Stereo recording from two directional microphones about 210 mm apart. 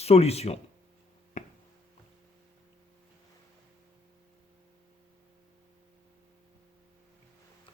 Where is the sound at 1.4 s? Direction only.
35° left (ahead or behind).